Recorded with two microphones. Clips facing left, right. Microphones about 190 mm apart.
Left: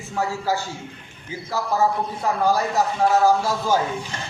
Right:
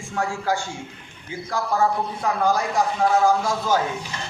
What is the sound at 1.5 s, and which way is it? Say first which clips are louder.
A man's voice: even; 5° left (ahead or behind).